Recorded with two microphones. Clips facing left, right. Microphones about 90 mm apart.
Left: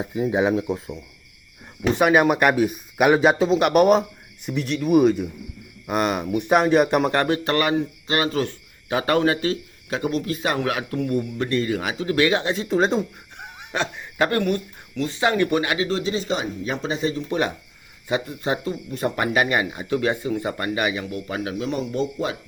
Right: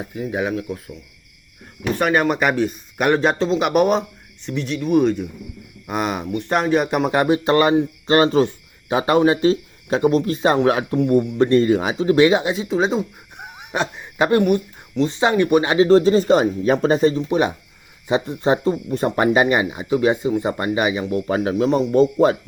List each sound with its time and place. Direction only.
0.0 s speech: 15° left (ahead or behind)
2.0 s speech: 5° left (ahead or behind)
7.2 s speech: 15° right (ahead or behind); by 8.4 s 30° right (ahead or behind)
8.4 s speech: 20° right (ahead or behind)
12.6 s speech: centre (ahead or behind)
13.4 s speech: 15° right (ahead or behind)
15.7 s speech: 35° right (ahead or behind)
17.2 s speech: 20° right (ahead or behind); by 22.4 s 40° right (ahead or behind)